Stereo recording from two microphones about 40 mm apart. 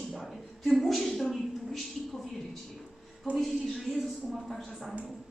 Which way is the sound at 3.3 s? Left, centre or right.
Centre.